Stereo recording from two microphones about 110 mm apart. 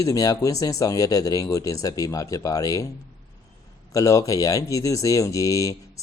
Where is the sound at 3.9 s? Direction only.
30° left (ahead or behind).